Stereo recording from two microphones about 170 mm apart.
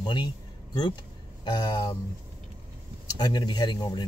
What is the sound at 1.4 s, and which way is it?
Speech, 25° left (ahead or behind).